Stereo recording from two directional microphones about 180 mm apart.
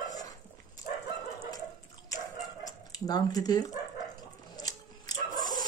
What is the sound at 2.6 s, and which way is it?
Dog, 20° left (ahead or behind).